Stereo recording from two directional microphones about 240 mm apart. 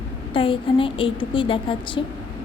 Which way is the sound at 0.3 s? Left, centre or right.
Left.